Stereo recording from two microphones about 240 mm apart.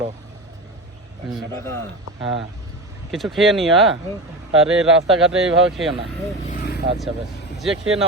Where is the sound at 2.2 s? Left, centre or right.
Centre.